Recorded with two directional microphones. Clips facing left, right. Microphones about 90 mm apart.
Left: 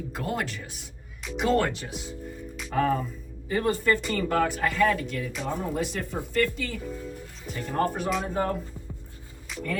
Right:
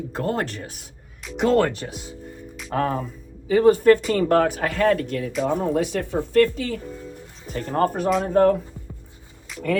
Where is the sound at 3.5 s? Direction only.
55° right (ahead or behind).